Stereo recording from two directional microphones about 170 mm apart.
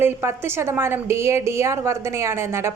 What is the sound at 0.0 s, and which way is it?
A woman's voice, 15° right (ahead or behind).